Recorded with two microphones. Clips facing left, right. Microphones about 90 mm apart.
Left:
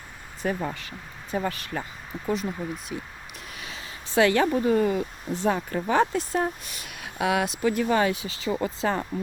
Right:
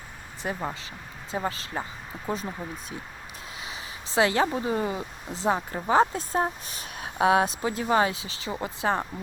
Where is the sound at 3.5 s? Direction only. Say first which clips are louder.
Right 1 dB; 20° right (ahead or behind).